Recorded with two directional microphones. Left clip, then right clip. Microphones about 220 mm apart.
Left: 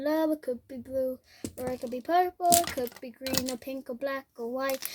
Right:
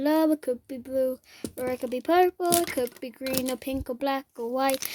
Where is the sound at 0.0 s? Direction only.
45° right (ahead or behind).